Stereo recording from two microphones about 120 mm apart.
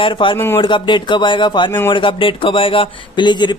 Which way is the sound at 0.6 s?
40° left (ahead or behind).